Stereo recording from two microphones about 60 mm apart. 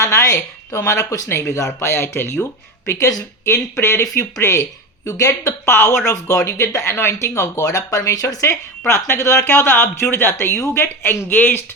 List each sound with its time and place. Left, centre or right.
0.0 s speech: left
4.0 s speech: left
5.0 s speech: left
5.6 s speech: left
6.1 s speech: left
8.9 s speech: left